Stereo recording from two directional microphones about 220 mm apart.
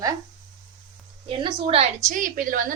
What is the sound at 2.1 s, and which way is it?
Speech, 40° right (ahead or behind).